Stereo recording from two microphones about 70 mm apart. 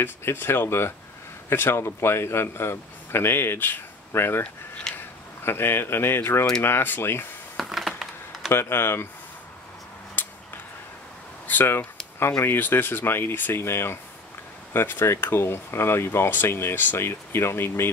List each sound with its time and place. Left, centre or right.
0.0 s speech: left
4.4 s speech: centre
5.4 s speech: left
7.5 s typing: centre
8.5 s speech: left
10.2 s a sound: left
11.4 s speech: left